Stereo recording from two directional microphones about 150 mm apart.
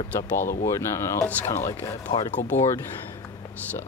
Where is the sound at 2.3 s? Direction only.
55° left (ahead or behind).